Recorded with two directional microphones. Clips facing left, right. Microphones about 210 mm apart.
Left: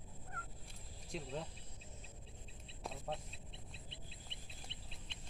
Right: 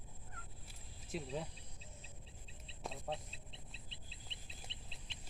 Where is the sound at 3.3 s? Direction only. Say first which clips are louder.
Left 2 dB; 55° left (ahead or behind).